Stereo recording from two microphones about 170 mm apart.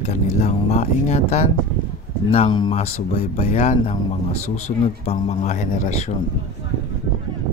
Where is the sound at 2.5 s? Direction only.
25° left (ahead or behind).